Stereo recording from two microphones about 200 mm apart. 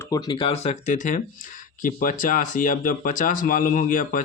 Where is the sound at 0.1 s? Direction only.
20° left (ahead or behind).